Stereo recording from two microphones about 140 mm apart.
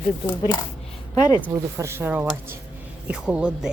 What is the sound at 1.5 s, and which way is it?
Speech, 20° right (ahead or behind).